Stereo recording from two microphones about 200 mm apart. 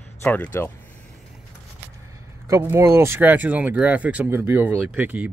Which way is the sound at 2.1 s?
15° right (ahead or behind).